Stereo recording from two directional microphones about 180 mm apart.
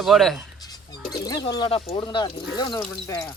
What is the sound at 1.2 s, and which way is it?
Speech, 20° left (ahead or behind).